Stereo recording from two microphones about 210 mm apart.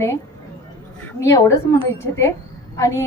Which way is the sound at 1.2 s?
15° left (ahead or behind).